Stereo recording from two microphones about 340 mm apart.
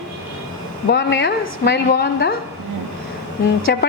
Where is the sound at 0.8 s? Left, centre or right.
Left.